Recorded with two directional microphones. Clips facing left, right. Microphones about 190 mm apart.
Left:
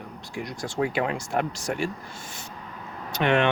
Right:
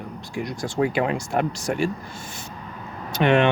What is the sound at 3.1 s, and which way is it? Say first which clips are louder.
Speech: right 4 dB; 15° right (ahead or behind).